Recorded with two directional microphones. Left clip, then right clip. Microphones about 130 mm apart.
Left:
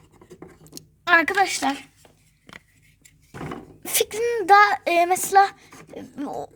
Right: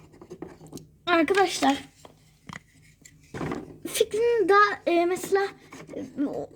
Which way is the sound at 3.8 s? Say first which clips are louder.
Even; 50° left (ahead or behind).